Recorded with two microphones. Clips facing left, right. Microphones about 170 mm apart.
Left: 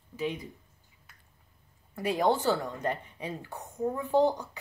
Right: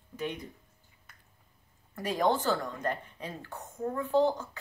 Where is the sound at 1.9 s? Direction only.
10° left (ahead or behind).